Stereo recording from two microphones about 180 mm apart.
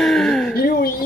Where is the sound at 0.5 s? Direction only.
60° left (ahead or behind).